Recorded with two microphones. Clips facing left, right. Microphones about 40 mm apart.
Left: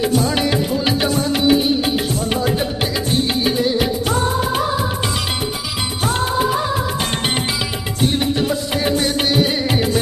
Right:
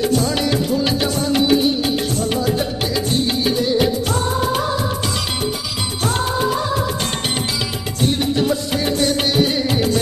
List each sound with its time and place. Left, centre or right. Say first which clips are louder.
0.0 s music: left 1 dB; centre
6.0 s music of bollywood: left 1 dB; centre
8.0 s music: even; centre